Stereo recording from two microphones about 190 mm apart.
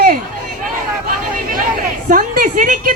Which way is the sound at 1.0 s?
45° right (ahead or behind).